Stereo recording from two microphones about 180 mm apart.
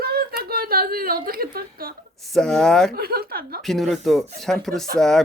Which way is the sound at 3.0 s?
60° right (ahead or behind).